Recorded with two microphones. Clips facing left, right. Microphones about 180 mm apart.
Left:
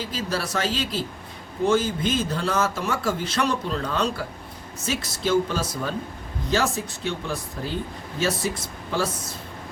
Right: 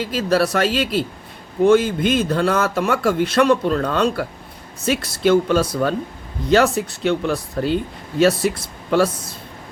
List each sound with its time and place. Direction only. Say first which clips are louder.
0.0 s a man's voice: right 10 dB; 65° right (ahead or behind)